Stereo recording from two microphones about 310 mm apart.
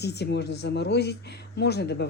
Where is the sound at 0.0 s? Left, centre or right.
Left.